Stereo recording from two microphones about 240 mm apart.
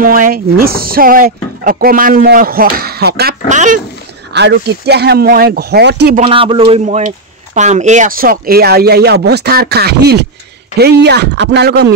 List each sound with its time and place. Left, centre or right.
0.0 s speech: right
4.3 s speech: right
6.2 s speech: right